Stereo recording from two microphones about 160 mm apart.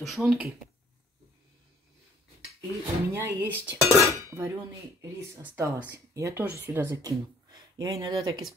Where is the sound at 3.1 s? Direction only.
15° right (ahead or behind).